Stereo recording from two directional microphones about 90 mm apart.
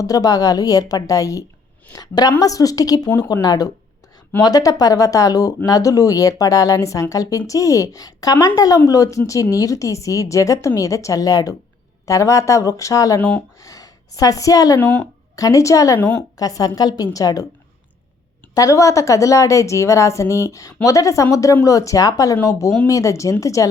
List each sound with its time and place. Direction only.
0.0 s a woman's voice: 40° left (ahead or behind)
14.8 s speech: 20° left (ahead or behind)
15.4 s speech: 40° left (ahead or behind)
16.0 s speech: 20° left (ahead or behind)
16.4 s a woman's voice: 40° left (ahead or behind)
18.5 s speech: 35° left (ahead or behind)